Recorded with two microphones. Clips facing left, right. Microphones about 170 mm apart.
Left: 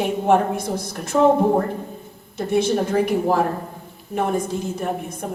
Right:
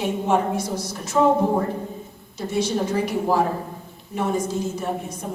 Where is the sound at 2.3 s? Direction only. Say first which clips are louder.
Left 4 dB; 55° left (ahead or behind).